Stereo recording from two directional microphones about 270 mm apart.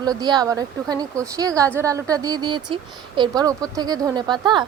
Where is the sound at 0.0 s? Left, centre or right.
Centre.